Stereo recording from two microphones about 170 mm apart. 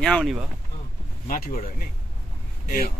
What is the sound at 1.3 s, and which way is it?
Speech, 60° left (ahead or behind).